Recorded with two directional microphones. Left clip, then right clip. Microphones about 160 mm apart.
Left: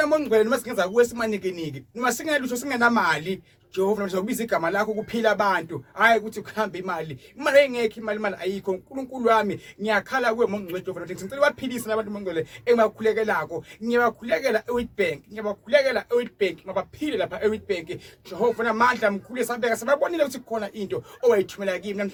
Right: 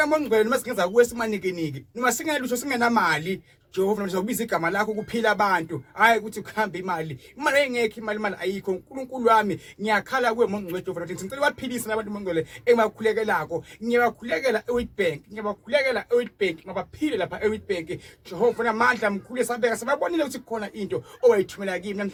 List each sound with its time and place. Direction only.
0.0 s speech: 20° left (ahead or behind)